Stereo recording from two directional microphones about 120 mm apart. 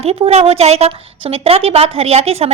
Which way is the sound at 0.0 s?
55° right (ahead or behind).